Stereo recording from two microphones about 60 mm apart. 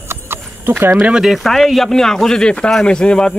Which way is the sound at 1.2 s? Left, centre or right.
Centre.